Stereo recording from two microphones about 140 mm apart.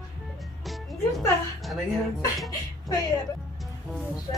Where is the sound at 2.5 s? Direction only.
30° left (ahead or behind).